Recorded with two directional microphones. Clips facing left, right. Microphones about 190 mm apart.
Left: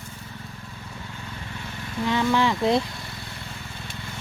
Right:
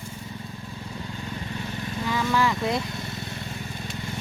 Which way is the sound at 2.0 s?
25° left (ahead or behind).